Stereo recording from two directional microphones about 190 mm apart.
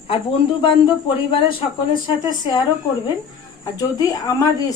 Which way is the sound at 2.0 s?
25° left (ahead or behind).